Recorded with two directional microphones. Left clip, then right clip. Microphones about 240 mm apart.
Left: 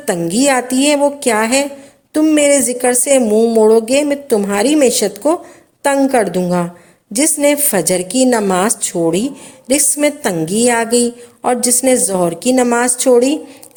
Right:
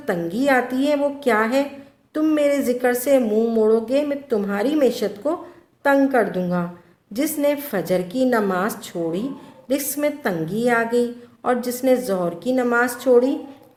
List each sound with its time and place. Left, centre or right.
0.0 s a woman's voice: left